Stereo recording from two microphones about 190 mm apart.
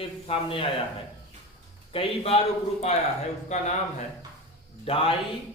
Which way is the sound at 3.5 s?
35° left (ahead or behind).